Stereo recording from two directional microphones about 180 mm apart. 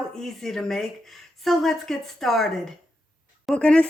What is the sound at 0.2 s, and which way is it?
Speech, centre (ahead or behind).